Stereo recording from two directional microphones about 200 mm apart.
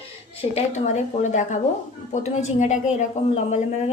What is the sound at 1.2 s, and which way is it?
A woman's voice, 35° left (ahead or behind).